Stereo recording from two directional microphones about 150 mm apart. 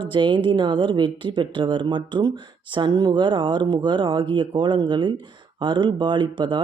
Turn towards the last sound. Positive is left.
turn(degrees=-30)  # may be behind; listen again after turning